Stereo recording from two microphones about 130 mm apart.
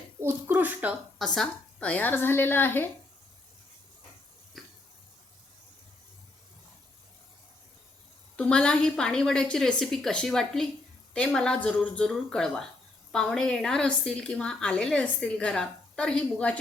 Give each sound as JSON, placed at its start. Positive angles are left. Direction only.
{"t": 0.2, "sound": "speech", "side_deg": -20}
{"t": 1.2, "sound": "a woman's voice", "side_deg": 5}
{"t": 4.6, "sound": "water", "side_deg": 0}
{"t": 8.4, "sound": "a woman's voice", "side_deg": 5}